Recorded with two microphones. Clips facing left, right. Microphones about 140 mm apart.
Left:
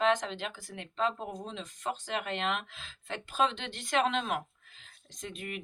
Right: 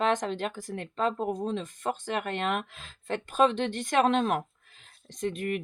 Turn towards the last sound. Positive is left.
turn(degrees=-50)  # may be behind; listen again after turning